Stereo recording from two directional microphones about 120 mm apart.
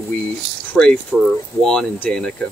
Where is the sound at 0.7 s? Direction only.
10° left (ahead or behind).